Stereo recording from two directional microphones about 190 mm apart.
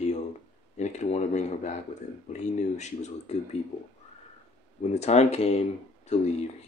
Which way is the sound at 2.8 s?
40° left (ahead or behind).